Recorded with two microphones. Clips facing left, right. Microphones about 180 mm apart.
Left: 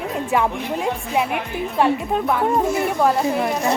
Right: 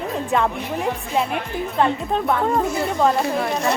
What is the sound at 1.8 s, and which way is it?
Speech, 10° left (ahead or behind).